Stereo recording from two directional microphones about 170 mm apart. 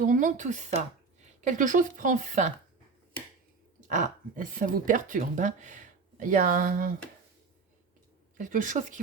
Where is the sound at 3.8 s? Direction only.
50° right (ahead or behind).